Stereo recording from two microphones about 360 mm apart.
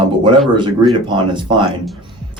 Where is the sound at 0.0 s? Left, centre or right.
Centre.